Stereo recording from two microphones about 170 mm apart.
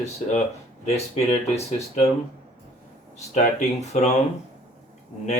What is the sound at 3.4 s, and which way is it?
Speech, 40° left (ahead or behind).